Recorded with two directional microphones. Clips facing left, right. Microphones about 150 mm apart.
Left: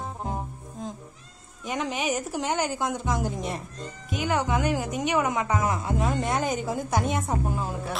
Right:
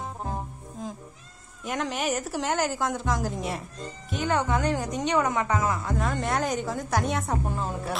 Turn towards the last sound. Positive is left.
turn(degrees=0)  # may be behind; listen again after turning